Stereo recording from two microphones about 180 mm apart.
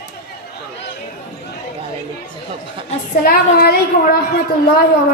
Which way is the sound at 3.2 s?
55° left (ahead or behind).